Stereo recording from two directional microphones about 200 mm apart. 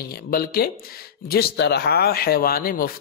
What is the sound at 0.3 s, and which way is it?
Speech, 50° left (ahead or behind).